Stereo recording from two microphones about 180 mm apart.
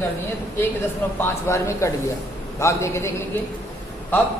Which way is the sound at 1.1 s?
15° left (ahead or behind).